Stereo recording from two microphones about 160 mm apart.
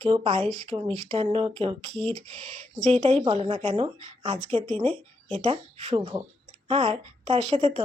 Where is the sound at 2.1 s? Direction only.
40° right (ahead or behind).